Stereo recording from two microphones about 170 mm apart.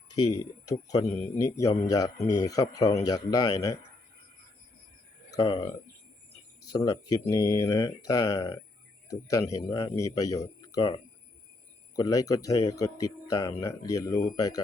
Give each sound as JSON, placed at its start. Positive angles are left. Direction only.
{"t": 0.7, "sound": "a man's voice", "side_deg": 20}
{"t": 5.5, "sound": "speech", "side_deg": 30}